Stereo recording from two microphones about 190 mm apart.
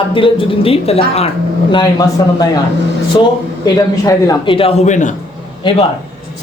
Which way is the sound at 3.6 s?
20° left (ahead or behind).